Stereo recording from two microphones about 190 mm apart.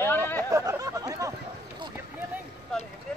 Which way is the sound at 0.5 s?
15° right (ahead or behind).